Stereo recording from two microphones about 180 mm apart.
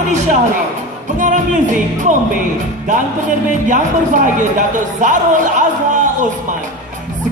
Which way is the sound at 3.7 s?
45° right (ahead or behind).